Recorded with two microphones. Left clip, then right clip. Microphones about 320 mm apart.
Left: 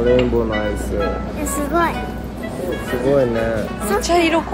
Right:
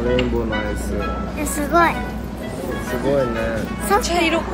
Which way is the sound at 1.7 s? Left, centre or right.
Centre.